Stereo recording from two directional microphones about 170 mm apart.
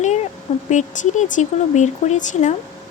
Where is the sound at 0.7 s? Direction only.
45° left (ahead or behind).